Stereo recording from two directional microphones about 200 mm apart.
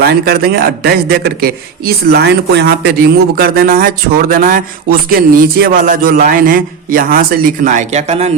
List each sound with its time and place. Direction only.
0.0 s a man's voice: 50° right (ahead or behind); by 8.3 s 35° right (ahead or behind)